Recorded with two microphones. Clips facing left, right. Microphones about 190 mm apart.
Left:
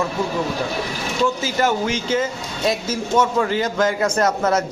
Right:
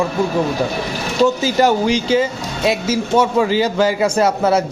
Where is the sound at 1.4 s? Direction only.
35° right (ahead or behind).